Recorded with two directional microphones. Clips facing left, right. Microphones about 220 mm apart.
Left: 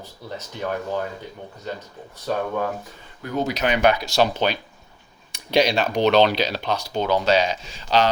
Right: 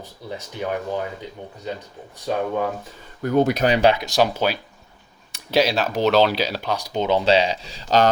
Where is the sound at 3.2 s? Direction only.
55° right (ahead or behind).